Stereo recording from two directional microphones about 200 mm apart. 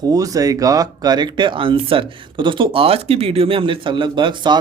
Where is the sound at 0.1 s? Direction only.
15° right (ahead or behind).